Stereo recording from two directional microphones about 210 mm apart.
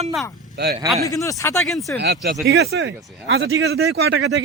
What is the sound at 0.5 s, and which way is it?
Speech, 50° right (ahead or behind).